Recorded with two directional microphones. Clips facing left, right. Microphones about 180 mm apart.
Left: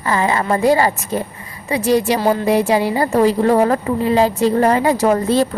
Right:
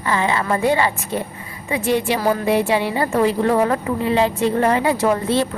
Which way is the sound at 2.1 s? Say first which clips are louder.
Left 3 dB; 30° left (ahead or behind).